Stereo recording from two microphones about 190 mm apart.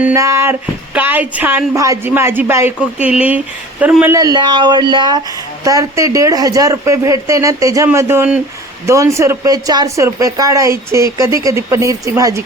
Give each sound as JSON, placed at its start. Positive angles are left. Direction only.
{"t": 0.0, "sound": "a woman's voice", "side_deg": -15}